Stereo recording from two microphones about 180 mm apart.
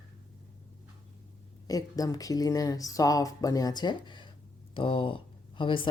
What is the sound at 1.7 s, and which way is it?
Speech, 20° left (ahead or behind).